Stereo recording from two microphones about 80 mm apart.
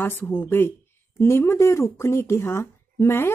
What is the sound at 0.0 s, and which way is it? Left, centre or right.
Speech, left.